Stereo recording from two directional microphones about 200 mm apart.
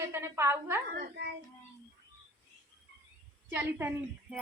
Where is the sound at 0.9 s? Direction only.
50° right (ahead or behind).